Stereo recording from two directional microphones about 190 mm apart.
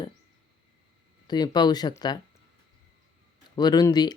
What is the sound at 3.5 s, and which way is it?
Speech, 20° left (ahead or behind).